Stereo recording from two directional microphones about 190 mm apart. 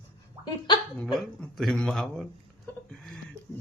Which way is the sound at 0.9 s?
Centre (ahead or behind).